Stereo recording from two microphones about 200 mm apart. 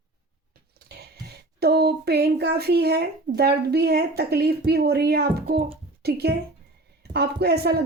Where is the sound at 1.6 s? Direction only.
50° right (ahead or behind).